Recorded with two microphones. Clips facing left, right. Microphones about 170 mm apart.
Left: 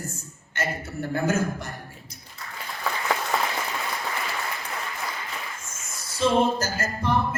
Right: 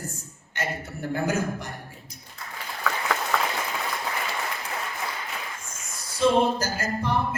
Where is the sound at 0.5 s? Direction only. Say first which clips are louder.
Left 2 dB; 15° right (ahead or behind).